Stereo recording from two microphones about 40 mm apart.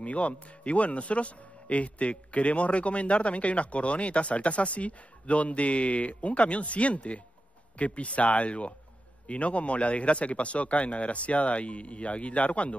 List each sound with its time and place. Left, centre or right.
0.0 s speech: left